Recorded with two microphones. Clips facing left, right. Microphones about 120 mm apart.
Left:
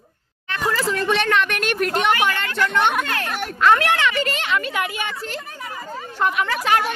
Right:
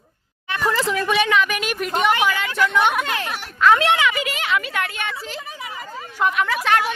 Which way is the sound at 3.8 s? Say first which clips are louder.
Right 2 dB; 20° right (ahead or behind).